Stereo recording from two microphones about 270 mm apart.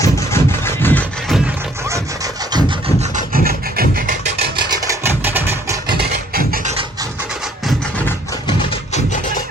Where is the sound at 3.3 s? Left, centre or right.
Right.